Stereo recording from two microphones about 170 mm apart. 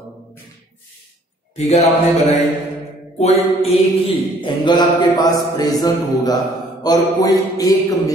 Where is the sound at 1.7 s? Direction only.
40° left (ahead or behind).